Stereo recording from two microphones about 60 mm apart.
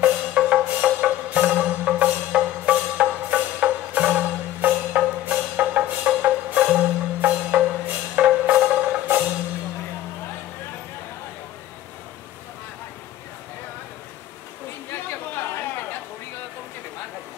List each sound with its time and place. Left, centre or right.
0.0 s music: right
8.2 s wood block: right
14.9 s chatter: left